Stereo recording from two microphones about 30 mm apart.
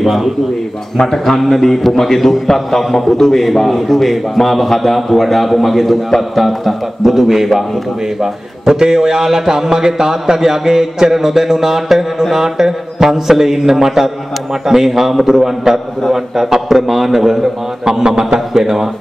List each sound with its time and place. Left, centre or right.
0.0 s a man's voice: centre
0.9 s a man's voice: centre
8.2 s a man's voice: right
17.8 s speech: right
18.5 s a man's voice: centre